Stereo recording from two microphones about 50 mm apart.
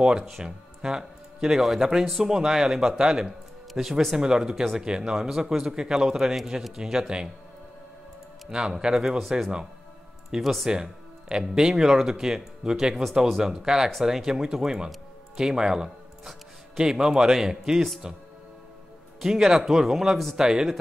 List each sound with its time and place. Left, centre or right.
0.4 s speech: centre
8.5 s speech: centre
10.4 s speech: centre
10.7 s a man's voice: centre
19.2 s speech: centre